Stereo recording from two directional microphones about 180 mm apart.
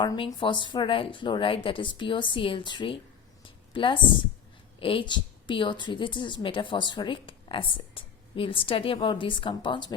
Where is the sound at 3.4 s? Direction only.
30° left (ahead or behind).